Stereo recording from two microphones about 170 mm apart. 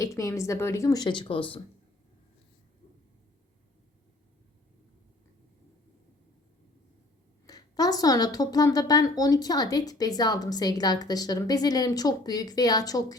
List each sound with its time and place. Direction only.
0.0 s a woman's voice: 20° left (ahead or behind)
7.4 s a woman's voice: 20° left (ahead or behind)